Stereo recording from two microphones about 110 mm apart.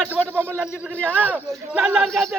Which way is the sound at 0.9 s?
15° left (ahead or behind).